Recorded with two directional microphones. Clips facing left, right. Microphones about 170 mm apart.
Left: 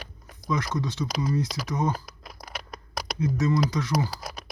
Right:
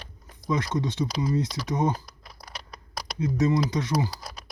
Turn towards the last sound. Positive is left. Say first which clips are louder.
# even
turn(degrees=-25)  # may be behind; listen again after turning